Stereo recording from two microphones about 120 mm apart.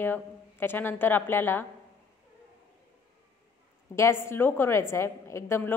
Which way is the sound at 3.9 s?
20° left (ahead or behind).